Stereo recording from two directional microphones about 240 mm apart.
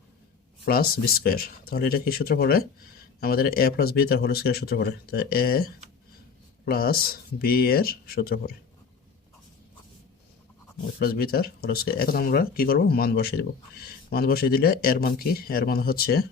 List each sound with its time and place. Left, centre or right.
0.6 s speech: left
6.7 s speech: left
11.0 s speech: left